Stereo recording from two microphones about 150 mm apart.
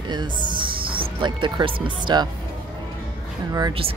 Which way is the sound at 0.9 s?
35° right (ahead or behind).